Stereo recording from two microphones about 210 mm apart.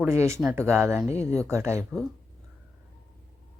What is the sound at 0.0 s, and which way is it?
A woman's voice, 15° right (ahead or behind).